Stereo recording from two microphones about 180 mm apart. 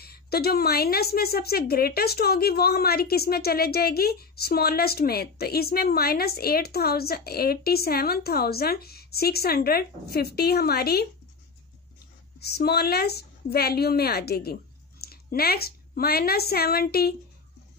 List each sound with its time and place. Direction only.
0.0 s a woman's voice: 60° left (ahead or behind)
12.4 s a woman's voice: 65° left (ahead or behind)